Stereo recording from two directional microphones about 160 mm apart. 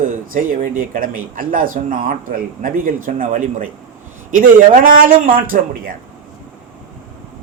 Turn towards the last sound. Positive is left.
turn(degrees=-60)  # may be behind; listen again after turning